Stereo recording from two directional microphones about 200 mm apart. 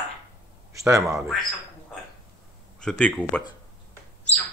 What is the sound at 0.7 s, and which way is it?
Speech, 15° right (ahead or behind).